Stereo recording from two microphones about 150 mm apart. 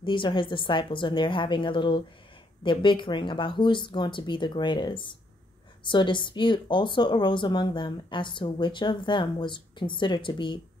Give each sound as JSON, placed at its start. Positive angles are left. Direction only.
{"t": 0.0, "sound": "speech", "side_deg": 35}